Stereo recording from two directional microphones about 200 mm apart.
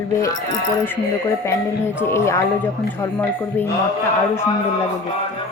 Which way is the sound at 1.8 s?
15° left (ahead or behind).